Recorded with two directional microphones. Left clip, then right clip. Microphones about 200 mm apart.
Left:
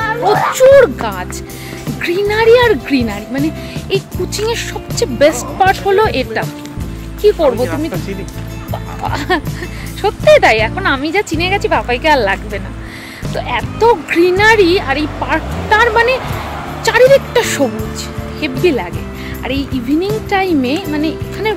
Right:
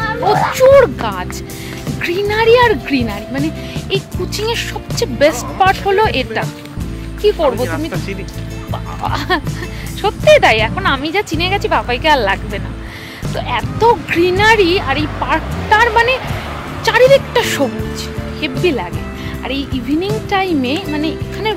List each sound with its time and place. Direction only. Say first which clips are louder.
0.0 s a sound: left 1 dB; 55° right (ahead or behind)
0.6 s speech: left 2 dB; centre (ahead or behind)
2.0 s speech: left 2 dB; centre (ahead or behind)